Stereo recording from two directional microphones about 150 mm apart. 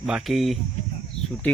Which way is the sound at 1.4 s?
10° left (ahead or behind).